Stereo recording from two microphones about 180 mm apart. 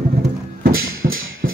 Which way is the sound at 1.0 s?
50° right (ahead or behind).